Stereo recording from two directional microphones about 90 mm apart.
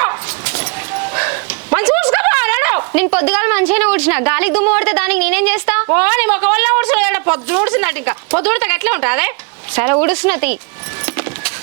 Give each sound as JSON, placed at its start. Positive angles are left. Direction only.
{"t": 0.0, "sound": "vehicle", "side_deg": -25}
{"t": 1.1, "sound": "speech", "side_deg": -30}
{"t": 11.0, "sound": "keys jangling", "side_deg": -20}